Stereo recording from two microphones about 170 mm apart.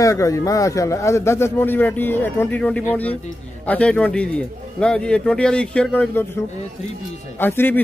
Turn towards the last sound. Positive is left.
turn(degrees=10)  # may be behind; listen again after turning